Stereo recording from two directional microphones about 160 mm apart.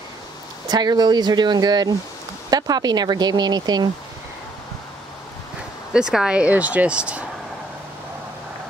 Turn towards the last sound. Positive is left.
turn(degrees=-5)  # may be behind; listen again after turning